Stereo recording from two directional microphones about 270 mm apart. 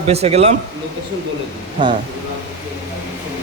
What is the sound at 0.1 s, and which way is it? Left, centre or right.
Speech, right.